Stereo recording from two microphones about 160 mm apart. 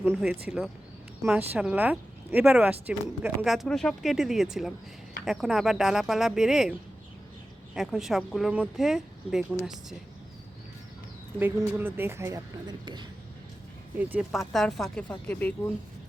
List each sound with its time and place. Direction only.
0.2 s speech: 5° right (ahead or behind)
11.3 s speech: 10° right (ahead or behind); by 13.1 s 25° right (ahead or behind)
14.0 s speech: 10° right (ahead or behind); by 15.5 s 10° left (ahead or behind)